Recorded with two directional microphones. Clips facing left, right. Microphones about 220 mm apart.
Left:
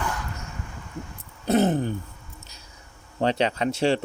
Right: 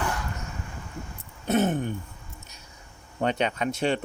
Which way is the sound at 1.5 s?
35° left (ahead or behind).